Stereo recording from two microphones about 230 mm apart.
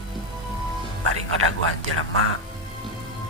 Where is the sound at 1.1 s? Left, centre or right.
Right.